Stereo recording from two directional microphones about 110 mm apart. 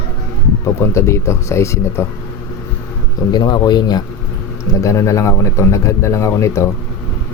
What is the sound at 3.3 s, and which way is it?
Speech, 40° left (ahead or behind).